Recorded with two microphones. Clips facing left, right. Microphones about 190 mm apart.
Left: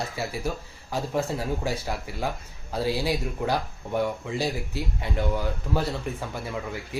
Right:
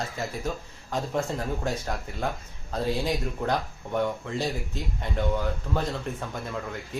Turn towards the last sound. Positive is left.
turn(degrees=10)  # may be behind; listen again after turning